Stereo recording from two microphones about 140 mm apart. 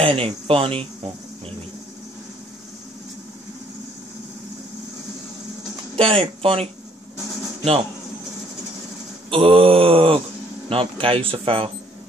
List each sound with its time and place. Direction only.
0.0 s speech: 40° right (ahead or behind)
5.9 s speech: 40° right (ahead or behind)
9.3 s speech: 40° right (ahead or behind)